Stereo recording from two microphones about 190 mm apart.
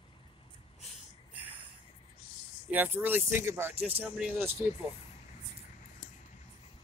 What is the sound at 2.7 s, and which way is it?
Speech, 10° right (ahead or behind).